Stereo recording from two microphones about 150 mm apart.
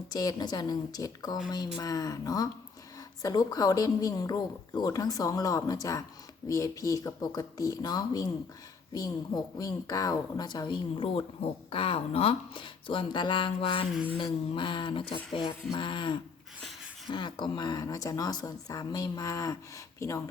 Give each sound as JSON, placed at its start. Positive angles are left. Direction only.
{"t": 0.1, "sound": "speech", "side_deg": 25}